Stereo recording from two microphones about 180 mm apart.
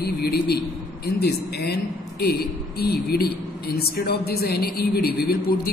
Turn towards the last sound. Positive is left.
turn(degrees=55)  # may be behind; listen again after turning